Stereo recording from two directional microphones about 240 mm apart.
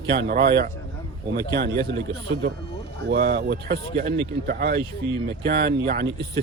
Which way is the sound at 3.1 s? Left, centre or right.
Right.